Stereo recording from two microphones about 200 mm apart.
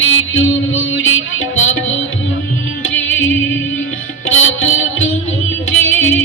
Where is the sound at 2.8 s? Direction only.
75° left (ahead or behind).